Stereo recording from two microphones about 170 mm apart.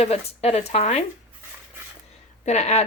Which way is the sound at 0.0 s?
40° left (ahead or behind).